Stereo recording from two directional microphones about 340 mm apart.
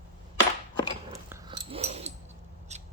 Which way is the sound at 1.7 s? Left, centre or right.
Centre.